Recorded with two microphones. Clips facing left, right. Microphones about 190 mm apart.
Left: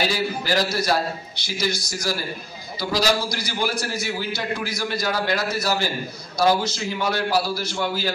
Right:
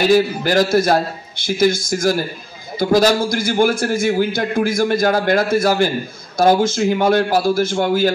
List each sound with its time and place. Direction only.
0.1 s a man's voice: 50° right (ahead or behind)